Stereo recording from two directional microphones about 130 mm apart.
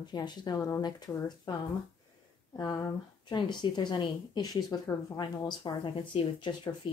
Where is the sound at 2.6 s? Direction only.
30° left (ahead or behind).